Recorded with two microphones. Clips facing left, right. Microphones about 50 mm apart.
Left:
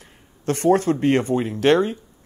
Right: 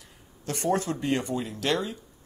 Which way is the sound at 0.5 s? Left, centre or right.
Left.